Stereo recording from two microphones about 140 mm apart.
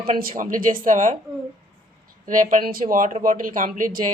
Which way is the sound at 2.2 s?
65° right (ahead or behind).